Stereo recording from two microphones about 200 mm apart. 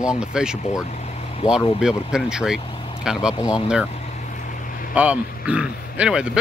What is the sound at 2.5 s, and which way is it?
Vehicle, 25° left (ahead or behind).